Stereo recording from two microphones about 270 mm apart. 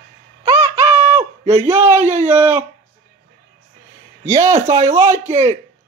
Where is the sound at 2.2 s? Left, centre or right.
Centre.